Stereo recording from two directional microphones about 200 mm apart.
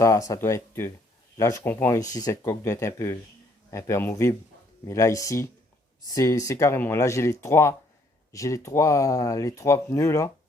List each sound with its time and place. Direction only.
0.0 s speech: 15° left (ahead or behind)